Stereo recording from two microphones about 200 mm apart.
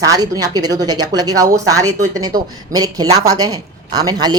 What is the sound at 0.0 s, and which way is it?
Speech, 20° right (ahead or behind).